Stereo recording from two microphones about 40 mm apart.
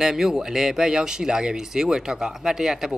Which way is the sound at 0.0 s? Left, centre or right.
Centre.